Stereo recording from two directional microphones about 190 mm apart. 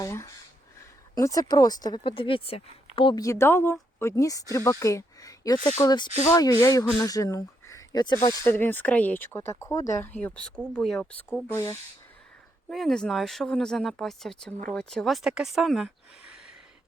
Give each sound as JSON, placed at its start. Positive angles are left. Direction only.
{"t": 0.0, "sound": "speech", "side_deg": 15}
{"t": 12.6, "sound": "speech", "side_deg": 0}